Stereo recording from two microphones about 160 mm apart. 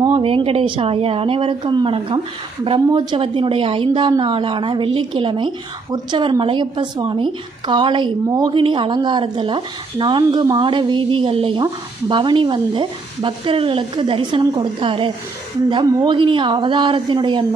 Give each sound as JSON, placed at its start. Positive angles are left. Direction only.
{"t": 0.0, "sound": "a woman's voice", "side_deg": -30}